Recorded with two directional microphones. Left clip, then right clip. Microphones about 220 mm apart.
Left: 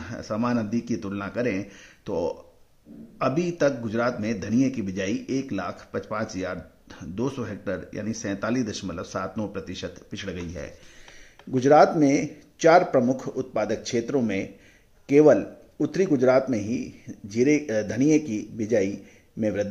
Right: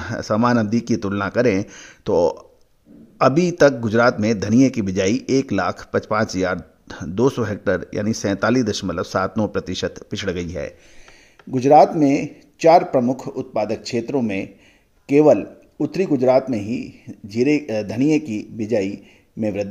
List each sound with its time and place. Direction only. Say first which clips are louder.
0.0 s a man's voice: right 9 dB; 40° right (ahead or behind)